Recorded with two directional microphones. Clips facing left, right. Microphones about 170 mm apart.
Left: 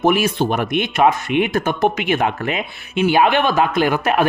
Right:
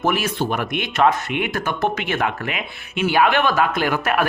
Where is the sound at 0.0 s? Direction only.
15° left (ahead or behind).